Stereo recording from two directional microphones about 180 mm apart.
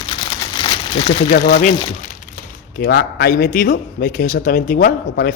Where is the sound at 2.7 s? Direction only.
60° left (ahead or behind).